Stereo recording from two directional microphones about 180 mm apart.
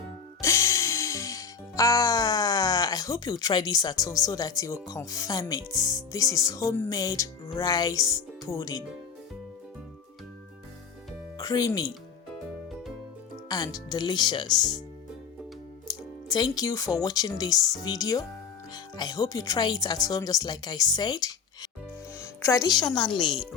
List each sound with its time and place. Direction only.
0.4 s music: 15° left (ahead or behind)
11.3 s speech: 20° left (ahead or behind)
13.5 s speech: 20° left (ahead or behind)
15.9 s speech: 20° left (ahead or behind)
22.2 s music: 15° left (ahead or behind)
23.1 s a woman's voice: centre (ahead or behind)